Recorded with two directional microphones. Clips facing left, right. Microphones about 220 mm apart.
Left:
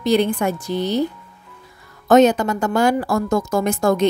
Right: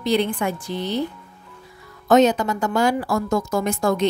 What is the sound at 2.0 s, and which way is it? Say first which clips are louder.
A woman's voice: left 3 dB; 50° left (ahead or behind).